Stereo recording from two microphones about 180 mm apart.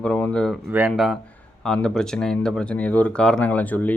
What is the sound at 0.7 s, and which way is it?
Speech, 5° right (ahead or behind).